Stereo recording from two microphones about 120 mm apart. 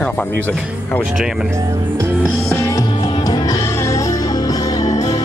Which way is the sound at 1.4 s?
25° right (ahead or behind).